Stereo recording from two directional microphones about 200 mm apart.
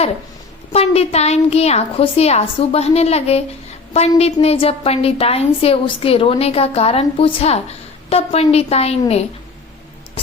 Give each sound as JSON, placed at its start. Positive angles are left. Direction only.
{"t": 0.7, "sound": "a woman's voice", "side_deg": 30}